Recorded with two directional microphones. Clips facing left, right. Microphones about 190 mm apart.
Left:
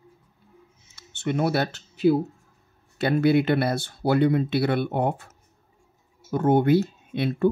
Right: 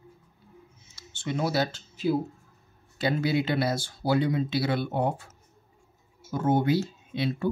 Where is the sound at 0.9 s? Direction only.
60° left (ahead or behind).